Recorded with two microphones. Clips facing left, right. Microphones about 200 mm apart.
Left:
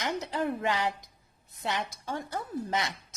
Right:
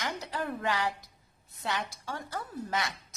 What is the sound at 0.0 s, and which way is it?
A woman's voice, 20° left (ahead or behind).